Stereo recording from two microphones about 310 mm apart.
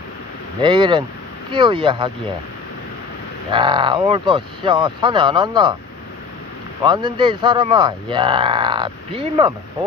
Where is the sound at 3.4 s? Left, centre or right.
Centre.